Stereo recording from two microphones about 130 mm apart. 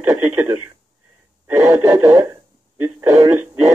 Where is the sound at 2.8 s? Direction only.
20° right (ahead or behind).